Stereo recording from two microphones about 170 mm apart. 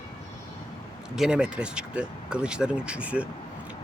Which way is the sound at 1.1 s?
5° right (ahead or behind).